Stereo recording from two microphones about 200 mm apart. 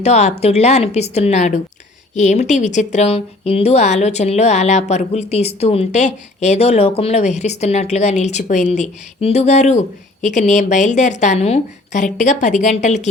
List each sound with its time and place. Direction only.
0.0 s a woman's voice: 35° left (ahead or behind)